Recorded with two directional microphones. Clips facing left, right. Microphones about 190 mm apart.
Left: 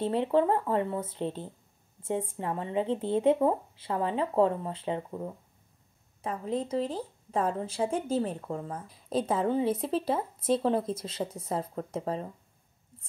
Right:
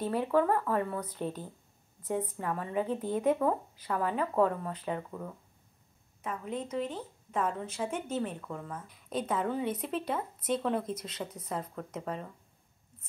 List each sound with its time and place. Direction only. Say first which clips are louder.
0.0 s speech: left 2 dB; 25° left (ahead or behind)